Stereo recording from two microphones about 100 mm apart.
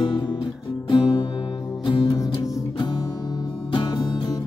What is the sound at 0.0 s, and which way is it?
Music, 50° left (ahead or behind).